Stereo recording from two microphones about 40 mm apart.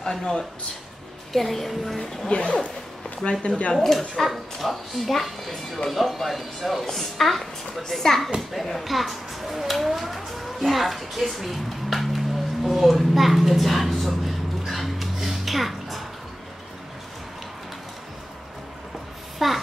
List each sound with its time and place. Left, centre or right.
0.0 s speech: centre
1.3 s a woman's voice: centre
2.2 s speech: left
3.7 s a child's voice: centre
12.6 s a sound: centre
19.3 s a sound: centre